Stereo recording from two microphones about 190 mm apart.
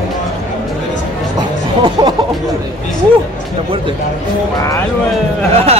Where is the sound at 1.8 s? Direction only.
25° right (ahead or behind).